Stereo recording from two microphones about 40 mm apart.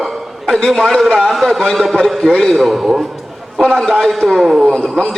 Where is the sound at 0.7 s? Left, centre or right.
Centre.